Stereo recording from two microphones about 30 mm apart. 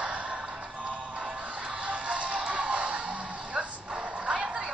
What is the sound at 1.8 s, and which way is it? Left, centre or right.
Music, right.